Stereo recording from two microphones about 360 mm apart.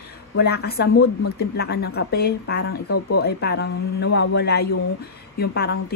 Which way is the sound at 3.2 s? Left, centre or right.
Left.